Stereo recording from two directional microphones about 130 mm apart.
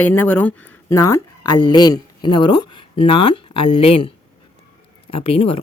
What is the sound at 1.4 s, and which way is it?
Speech, 35° left (ahead or behind).